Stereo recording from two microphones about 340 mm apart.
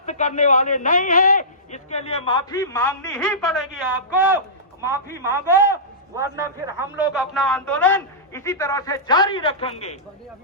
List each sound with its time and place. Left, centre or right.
0.0 s a man's voice: left